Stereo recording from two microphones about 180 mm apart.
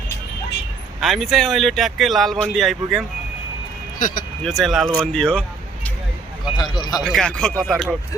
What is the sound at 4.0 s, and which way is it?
Speech, 50° left (ahead or behind).